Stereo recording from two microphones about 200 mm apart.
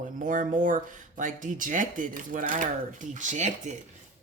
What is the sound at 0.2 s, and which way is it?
Speech, 40° right (ahead or behind).